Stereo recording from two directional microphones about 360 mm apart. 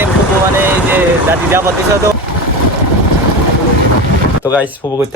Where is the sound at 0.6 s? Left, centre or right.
Centre.